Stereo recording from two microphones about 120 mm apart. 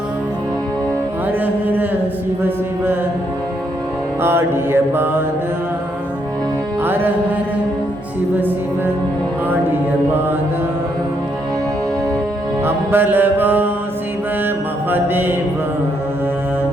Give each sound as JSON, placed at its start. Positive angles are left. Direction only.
{"t": 1.3, "sound": "music", "side_deg": -15}
{"t": 4.2, "sound": "mantra", "side_deg": -20}
{"t": 6.8, "sound": "music", "side_deg": -15}
{"t": 12.6, "sound": "music", "side_deg": -20}
{"t": 14.4, "sound": "mantra", "side_deg": -15}